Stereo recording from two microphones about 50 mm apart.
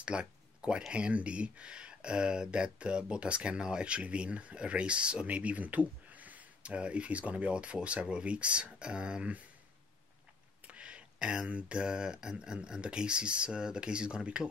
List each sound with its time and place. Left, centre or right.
0.0 s speech: centre
10.7 s speech: right